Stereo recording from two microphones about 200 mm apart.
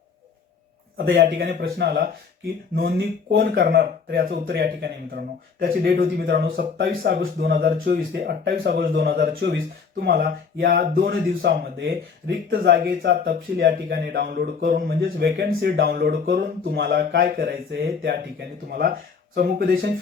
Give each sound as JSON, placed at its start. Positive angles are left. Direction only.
{"t": 0.9, "sound": "speech", "side_deg": -55}